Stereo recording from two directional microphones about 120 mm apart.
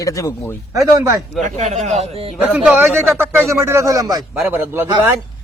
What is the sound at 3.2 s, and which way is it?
Speech, 20° right (ahead or behind).